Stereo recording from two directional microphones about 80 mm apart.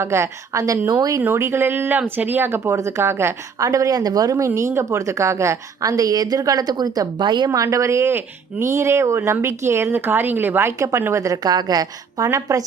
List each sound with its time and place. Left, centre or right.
0.0 s a woman's voice: right
0.9 s a woman's voice: right
1.2 s a woman's voice: right
7.3 s a woman's voice: right
7.5 s a woman's voice: right
11.4 s a woman's voice: right